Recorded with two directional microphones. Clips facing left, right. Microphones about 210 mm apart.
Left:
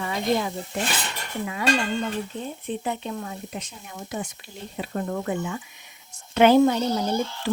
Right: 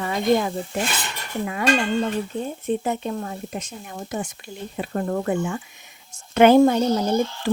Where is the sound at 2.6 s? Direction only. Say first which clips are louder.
Right 5 dB; 45° right (ahead or behind).